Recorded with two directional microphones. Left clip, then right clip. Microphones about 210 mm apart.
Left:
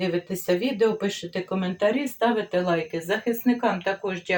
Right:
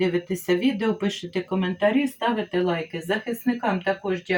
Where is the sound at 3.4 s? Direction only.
35° left (ahead or behind).